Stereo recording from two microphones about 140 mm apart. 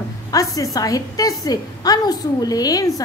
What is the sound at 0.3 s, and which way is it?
A woman's voice, 25° left (ahead or behind).